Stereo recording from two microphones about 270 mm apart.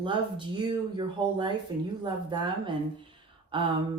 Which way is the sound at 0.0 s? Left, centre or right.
Centre.